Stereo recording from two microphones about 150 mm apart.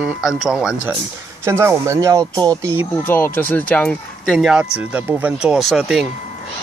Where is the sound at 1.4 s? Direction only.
15° right (ahead or behind).